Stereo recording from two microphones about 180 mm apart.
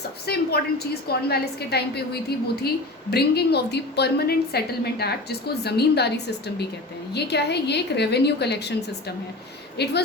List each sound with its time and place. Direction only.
0.3 s a woman's voice: 60° left (ahead or behind)
3.1 s a woman's voice: 65° left (ahead or behind)
9.7 s a woman's voice: 65° left (ahead or behind)